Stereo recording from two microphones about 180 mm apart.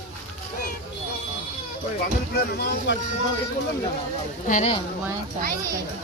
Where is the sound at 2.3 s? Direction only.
60° left (ahead or behind).